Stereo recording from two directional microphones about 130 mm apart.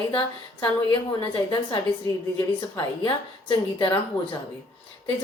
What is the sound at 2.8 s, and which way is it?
A woman's voice, 35° left (ahead or behind).